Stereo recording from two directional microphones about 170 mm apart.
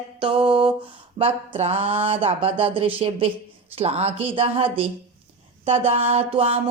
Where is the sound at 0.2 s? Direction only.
30° right (ahead or behind).